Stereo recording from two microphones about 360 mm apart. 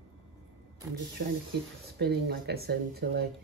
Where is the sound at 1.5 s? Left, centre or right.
Right.